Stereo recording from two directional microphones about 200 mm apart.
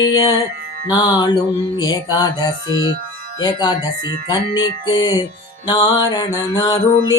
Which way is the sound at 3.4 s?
20° left (ahead or behind).